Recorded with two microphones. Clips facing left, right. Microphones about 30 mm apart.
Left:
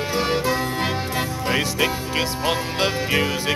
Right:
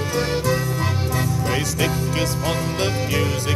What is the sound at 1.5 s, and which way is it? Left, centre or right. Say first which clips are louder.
Music: left 3 dB; left.